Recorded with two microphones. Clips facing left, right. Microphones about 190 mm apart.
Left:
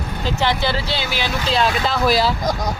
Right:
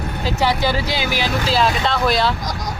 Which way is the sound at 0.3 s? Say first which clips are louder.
Right 1 dB; 10° right (ahead or behind).